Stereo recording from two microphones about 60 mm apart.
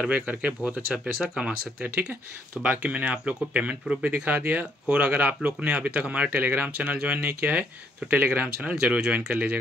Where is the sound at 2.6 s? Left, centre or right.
Right.